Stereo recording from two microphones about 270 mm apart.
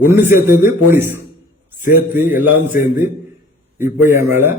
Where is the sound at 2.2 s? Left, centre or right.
Left.